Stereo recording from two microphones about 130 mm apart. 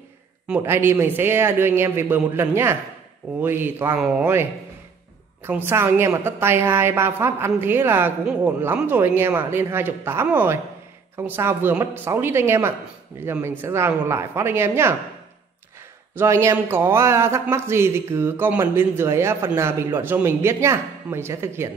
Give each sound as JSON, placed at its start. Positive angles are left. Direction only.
{"t": 0.6, "sound": "speech", "side_deg": -20}
{"t": 16.2, "sound": "speech", "side_deg": -20}